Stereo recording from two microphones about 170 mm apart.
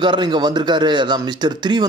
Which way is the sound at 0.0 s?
25° right (ahead or behind).